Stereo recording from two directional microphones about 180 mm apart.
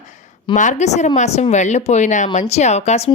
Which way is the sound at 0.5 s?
45° left (ahead or behind).